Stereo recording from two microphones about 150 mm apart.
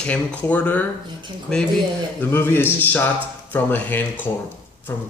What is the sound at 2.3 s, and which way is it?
Speech, 15° left (ahead or behind).